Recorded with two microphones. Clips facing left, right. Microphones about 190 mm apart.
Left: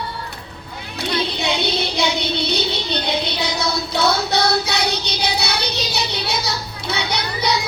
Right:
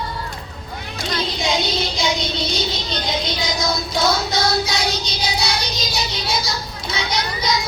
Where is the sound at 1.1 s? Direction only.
65° left (ahead or behind).